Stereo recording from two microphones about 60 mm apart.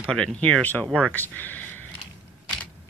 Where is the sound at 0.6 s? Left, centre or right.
Left.